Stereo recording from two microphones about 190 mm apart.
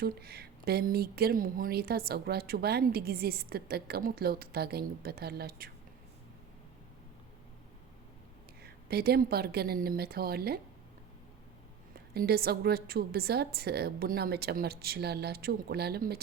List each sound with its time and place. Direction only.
0.0 s speech: 55° right (ahead or behind)
8.6 s speech: 55° right (ahead or behind)
12.1 s speech: 55° right (ahead or behind)